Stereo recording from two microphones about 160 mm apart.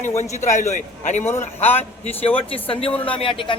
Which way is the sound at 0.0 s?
45° left (ahead or behind).